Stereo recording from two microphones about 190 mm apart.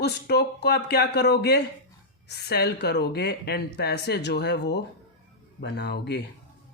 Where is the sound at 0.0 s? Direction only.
60° left (ahead or behind).